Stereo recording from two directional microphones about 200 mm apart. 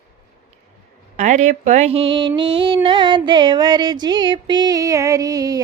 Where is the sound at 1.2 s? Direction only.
35° right (ahead or behind).